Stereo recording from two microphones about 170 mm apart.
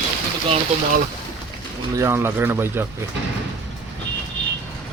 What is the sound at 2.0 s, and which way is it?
Speech, 15° right (ahead or behind).